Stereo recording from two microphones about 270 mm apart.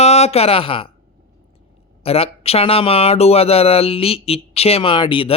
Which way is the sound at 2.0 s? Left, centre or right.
Left.